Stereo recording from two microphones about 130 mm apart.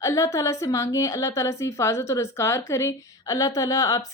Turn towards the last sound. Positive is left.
turn(degrees=25)  # may be behind; listen again after turning